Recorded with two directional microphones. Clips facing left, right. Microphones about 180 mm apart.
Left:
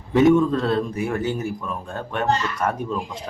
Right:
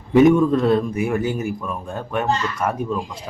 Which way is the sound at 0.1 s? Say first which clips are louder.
Right 2 dB; 15° right (ahead or behind).